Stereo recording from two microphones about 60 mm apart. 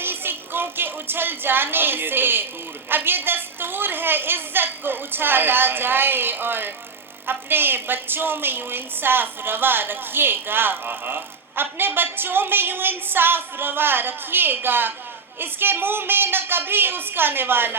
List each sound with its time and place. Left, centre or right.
0.0 s music: right
2.9 s a woman's voice: right